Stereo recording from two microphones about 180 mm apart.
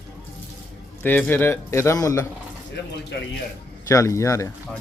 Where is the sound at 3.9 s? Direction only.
15° left (ahead or behind).